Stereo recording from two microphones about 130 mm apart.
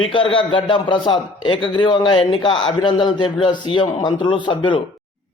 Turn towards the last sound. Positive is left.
turn(degrees=35)  # may be behind; listen again after turning